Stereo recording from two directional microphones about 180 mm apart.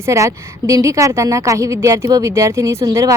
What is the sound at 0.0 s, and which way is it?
A woman's voice, 15° right (ahead or behind).